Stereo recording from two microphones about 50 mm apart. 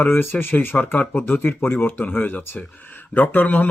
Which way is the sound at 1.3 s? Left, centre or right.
Left.